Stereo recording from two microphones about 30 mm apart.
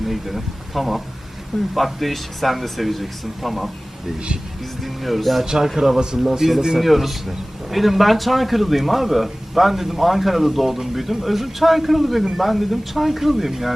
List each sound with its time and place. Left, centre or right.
0.0 s a man's voice: centre
4.8 s a man's voice: centre
6.7 s a man's voice: centre